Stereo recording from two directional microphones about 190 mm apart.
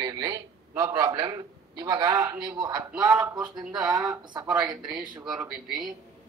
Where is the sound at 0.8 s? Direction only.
20° right (ahead or behind).